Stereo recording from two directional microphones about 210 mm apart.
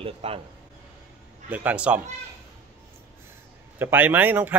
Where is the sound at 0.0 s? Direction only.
25° right (ahead or behind).